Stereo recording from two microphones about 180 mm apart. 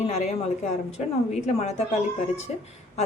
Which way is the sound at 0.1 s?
35° left (ahead or behind).